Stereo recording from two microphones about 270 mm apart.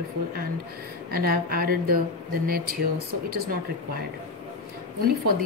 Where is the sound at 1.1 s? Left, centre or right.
Right.